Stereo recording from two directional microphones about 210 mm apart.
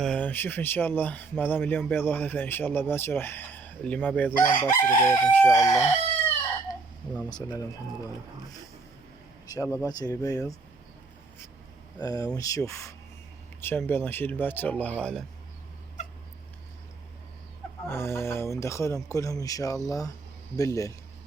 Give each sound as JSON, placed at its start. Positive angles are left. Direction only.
{"t": 0.0, "sound": "chicken", "side_deg": 5}
{"t": 7.3, "sound": "speech", "side_deg": 20}
{"t": 9.5, "sound": "chicken", "side_deg": 15}
{"t": 11.9, "sound": "chicken", "side_deg": 15}
{"t": 17.8, "sound": "chicken", "side_deg": 10}